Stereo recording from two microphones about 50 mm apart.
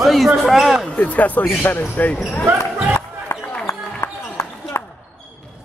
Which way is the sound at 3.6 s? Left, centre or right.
Left.